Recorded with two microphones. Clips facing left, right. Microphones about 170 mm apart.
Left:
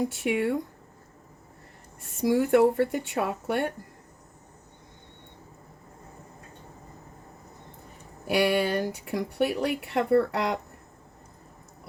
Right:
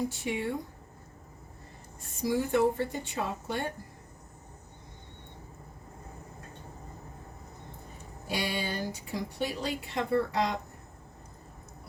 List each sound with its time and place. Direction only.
0.1 s speech: 65° left (ahead or behind)
2.2 s speech: 65° left (ahead or behind)
8.3 s speech: 65° left (ahead or behind)